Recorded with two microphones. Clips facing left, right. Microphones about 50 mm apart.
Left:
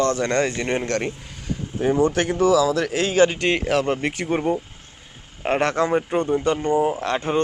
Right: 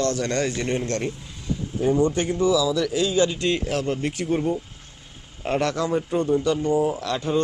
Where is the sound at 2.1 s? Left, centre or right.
Left.